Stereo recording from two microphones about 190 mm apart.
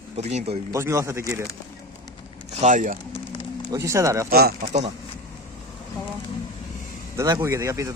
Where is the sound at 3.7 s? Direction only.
15° right (ahead or behind).